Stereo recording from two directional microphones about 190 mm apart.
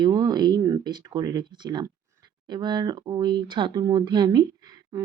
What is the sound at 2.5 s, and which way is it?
Speech, 20° right (ahead or behind).